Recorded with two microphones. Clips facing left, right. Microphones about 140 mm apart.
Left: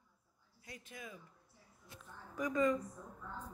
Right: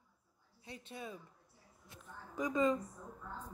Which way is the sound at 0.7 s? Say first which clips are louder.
Right 4 dB; 30° right (ahead or behind).